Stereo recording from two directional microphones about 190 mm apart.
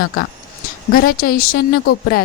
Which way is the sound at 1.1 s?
50° left (ahead or behind).